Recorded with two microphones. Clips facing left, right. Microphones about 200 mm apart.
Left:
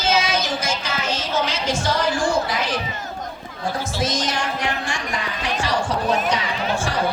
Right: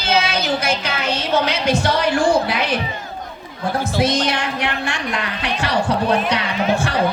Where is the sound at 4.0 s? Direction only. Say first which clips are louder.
Right 6 dB; 60° right (ahead or behind).